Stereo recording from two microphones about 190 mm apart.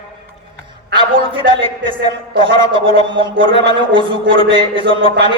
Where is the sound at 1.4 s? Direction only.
25° right (ahead or behind).